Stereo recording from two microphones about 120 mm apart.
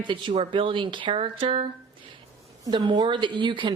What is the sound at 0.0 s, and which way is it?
Speech, 45° right (ahead or behind).